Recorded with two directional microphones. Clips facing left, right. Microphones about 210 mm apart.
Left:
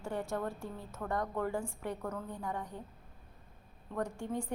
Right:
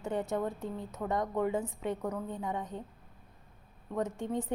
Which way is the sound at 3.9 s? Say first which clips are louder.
Right 3 dB; 20° right (ahead or behind).